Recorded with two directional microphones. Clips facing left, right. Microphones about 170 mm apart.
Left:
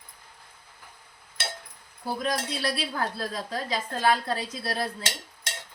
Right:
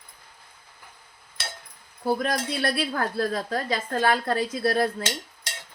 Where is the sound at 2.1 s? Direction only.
55° right (ahead or behind).